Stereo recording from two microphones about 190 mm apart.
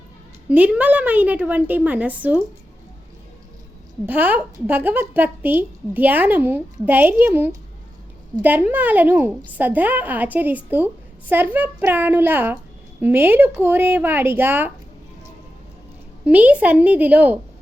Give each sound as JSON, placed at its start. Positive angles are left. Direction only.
{"t": 0.4, "sound": "a woman's voice", "side_deg": -10}
{"t": 4.0, "sound": "a woman's voice", "side_deg": -10}
{"t": 16.2, "sound": "a woman's voice", "side_deg": -5}